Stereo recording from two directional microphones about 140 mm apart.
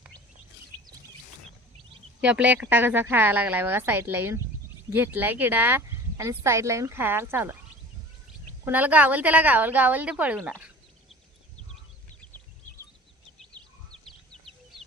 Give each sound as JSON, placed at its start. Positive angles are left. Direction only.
{"t": 2.2, "sound": "speech", "side_deg": -10}
{"t": 8.6, "sound": "speech", "side_deg": -10}